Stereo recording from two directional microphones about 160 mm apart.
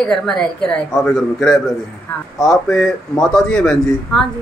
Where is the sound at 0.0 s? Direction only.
5° left (ahead or behind).